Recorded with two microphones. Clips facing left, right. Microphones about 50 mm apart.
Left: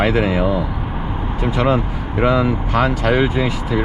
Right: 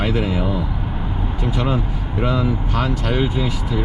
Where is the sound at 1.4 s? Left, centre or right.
Left.